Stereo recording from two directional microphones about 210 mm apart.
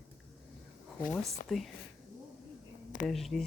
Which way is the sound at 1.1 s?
Centre (ahead or behind).